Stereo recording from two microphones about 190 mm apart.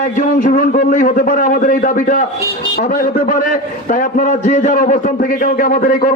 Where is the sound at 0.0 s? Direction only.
40° left (ahead or behind).